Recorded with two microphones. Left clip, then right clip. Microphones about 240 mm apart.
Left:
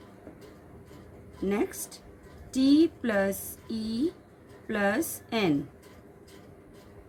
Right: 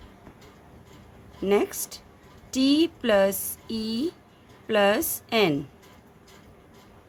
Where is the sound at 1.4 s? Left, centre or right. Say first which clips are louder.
Right 7 dB; right.